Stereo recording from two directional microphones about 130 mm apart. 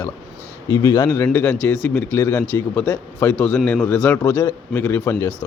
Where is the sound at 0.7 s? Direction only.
30° left (ahead or behind).